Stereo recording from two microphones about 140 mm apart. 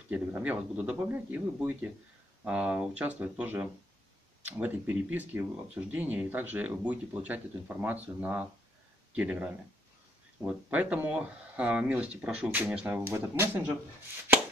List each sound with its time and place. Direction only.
0.1 s speech: 10° right (ahead or behind)